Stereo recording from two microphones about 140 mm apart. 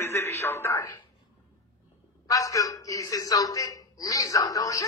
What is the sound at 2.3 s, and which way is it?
A woman's voice, 25° left (ahead or behind).